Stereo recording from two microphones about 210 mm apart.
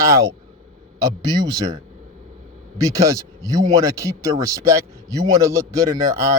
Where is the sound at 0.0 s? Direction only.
15° right (ahead or behind).